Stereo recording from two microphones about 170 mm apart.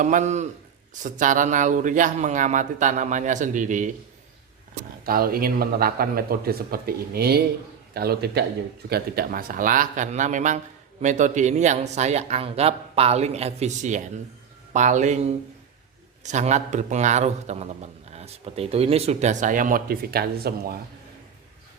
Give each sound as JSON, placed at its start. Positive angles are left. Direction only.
{"t": 0.0, "sound": "a man's voice", "side_deg": -45}
{"t": 5.0, "sound": "a man's voice", "side_deg": -60}